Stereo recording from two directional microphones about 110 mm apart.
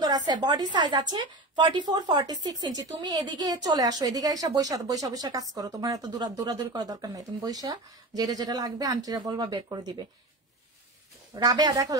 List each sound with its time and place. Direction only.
0.0 s a woman's voice: 40° right (ahead or behind)
11.3 s a woman's voice: 35° right (ahead or behind)